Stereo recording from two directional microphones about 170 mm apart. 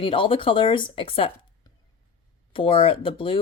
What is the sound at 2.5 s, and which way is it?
Speech, 30° left (ahead or behind).